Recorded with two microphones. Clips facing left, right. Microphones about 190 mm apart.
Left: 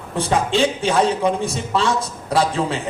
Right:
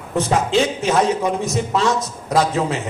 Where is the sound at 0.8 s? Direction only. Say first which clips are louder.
Even; 30° left (ahead or behind).